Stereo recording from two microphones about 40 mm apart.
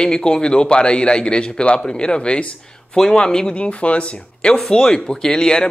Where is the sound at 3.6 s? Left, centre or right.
Left.